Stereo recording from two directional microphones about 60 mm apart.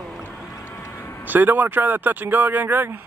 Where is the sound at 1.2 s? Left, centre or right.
Right.